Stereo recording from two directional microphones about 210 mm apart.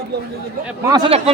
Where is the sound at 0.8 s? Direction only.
20° right (ahead or behind).